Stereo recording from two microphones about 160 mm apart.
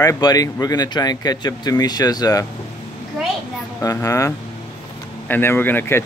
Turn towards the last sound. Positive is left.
turn(degrees=15)  # may be behind; listen again after turning